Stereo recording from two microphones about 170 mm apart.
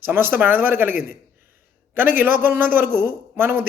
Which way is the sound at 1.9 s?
10° right (ahead or behind).